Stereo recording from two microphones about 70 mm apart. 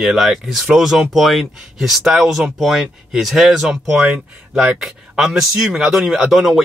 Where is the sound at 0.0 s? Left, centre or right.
Centre.